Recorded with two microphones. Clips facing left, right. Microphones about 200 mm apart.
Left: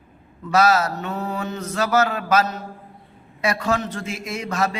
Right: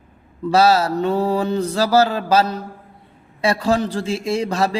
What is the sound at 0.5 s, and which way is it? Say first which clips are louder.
Mantra: right 3 dB; 30° right (ahead or behind).